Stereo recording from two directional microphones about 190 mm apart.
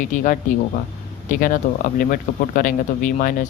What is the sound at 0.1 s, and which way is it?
Speech, 40° left (ahead or behind).